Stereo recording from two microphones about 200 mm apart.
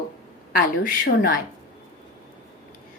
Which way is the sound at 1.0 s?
50° left (ahead or behind).